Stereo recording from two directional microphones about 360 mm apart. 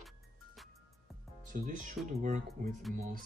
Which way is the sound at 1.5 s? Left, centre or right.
Right.